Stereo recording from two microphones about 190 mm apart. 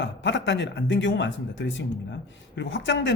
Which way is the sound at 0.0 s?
75° left (ahead or behind).